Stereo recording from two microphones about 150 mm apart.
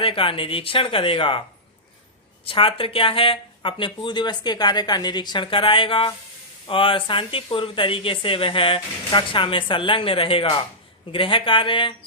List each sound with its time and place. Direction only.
0.0 s speech: 35° left (ahead or behind)
2.5 s speech: 35° left (ahead or behind)